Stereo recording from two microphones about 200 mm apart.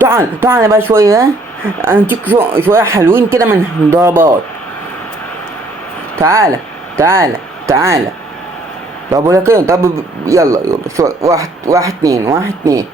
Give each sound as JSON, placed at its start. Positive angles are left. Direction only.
{"t": 0.0, "sound": "speech", "side_deg": -15}
{"t": 6.1, "sound": "speech", "side_deg": -15}
{"t": 9.1, "sound": "speech", "side_deg": -15}